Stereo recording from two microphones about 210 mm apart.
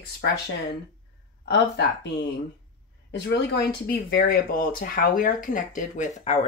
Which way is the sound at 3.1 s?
50° left (ahead or behind).